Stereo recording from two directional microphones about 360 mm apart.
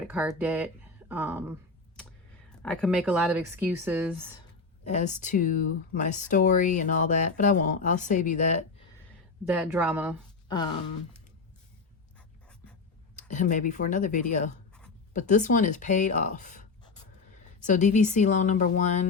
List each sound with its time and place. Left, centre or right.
0.1 s speech: centre
4.8 s speech: centre
9.5 s speech: centre
13.1 s speech: centre